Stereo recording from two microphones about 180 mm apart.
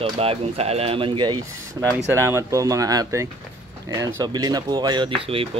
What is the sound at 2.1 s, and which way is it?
Speech, 15° right (ahead or behind).